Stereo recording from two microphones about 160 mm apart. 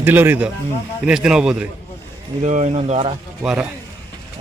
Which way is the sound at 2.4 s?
45° right (ahead or behind).